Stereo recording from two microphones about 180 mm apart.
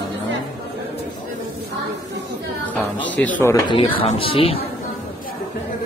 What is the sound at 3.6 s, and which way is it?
Speech, 30° left (ahead or behind).